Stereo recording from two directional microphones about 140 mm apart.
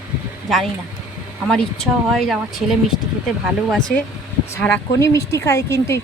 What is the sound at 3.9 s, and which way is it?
Speech, 90° left.